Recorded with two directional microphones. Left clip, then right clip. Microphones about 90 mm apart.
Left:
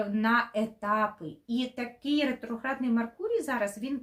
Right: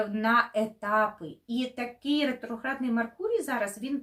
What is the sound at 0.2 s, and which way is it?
A woman's voice, 30° left (ahead or behind).